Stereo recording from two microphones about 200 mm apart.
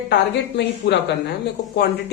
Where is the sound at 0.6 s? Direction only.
55° left (ahead or behind).